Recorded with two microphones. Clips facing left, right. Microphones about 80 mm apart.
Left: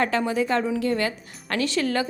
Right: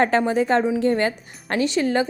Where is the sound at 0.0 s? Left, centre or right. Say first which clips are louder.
Right 4 dB; right.